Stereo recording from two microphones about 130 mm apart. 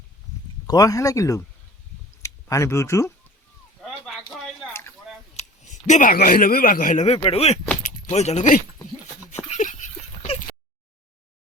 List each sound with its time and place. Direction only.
0.7 s speech: 25° left (ahead or behind)
4.0 s a sound: 5° left (ahead or behind)
5.4 s speech: 65° left (ahead or behind)
7.2 s speech: 50° left (ahead or behind); by 8.6 s 65° left (ahead or behind)
9.5 s dog: 70° left (ahead or behind)